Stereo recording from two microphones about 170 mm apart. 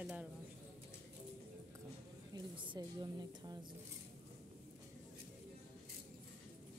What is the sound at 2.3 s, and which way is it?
A woman's voice, 30° right (ahead or behind).